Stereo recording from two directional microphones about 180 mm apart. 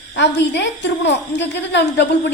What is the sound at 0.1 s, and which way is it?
A woman's voice, 75° left (ahead or behind).